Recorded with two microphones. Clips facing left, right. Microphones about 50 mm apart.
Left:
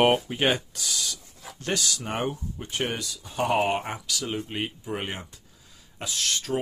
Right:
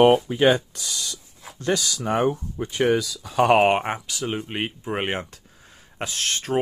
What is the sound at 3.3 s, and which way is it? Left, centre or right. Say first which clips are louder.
Speech: right 7 dB; right.